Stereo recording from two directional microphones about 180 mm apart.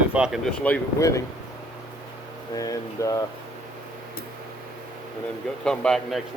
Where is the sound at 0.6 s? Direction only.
15° left (ahead or behind).